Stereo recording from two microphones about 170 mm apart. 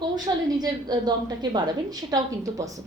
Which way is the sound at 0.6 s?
25° right (ahead or behind).